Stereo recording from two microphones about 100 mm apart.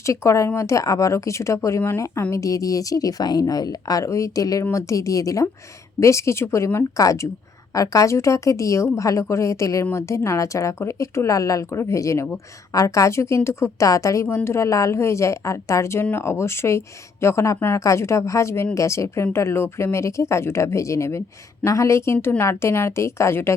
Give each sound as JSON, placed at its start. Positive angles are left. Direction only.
{"t": 0.0, "sound": "speech", "side_deg": 30}